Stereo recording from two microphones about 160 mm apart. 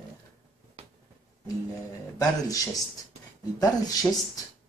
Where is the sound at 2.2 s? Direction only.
20° left (ahead or behind).